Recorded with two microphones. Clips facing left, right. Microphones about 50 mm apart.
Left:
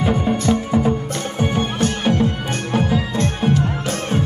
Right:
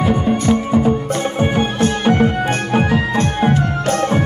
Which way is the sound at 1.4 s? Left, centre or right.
Right.